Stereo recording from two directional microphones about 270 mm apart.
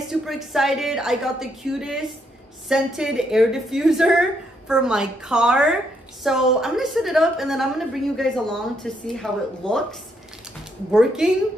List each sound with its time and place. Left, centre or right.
0.1 s a woman's voice: centre